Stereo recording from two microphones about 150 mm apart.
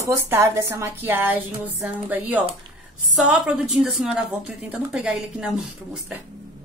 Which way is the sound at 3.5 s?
5° right (ahead or behind).